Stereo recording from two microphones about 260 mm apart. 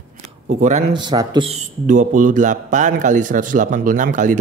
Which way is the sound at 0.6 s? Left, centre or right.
Right.